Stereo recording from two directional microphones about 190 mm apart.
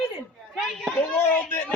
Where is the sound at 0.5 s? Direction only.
5° left (ahead or behind).